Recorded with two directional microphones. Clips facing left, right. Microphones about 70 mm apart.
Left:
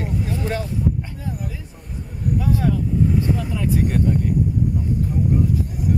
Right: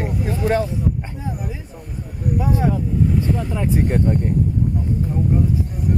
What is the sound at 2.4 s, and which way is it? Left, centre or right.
Speech, right.